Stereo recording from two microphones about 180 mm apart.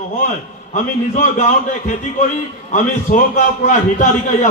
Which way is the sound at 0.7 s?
45° left (ahead or behind).